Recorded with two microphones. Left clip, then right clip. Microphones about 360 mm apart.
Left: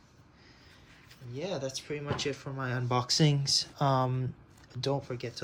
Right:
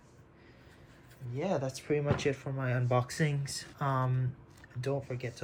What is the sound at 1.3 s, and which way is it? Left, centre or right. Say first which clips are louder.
Speech: right 2 dB; centre.